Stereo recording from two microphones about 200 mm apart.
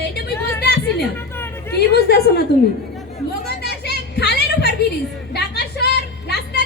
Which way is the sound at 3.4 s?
55° left (ahead or behind).